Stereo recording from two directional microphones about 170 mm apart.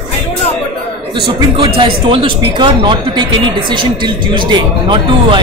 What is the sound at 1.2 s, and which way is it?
Speech, 30° right (ahead or behind).